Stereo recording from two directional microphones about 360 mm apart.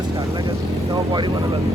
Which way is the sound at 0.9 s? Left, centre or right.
Centre.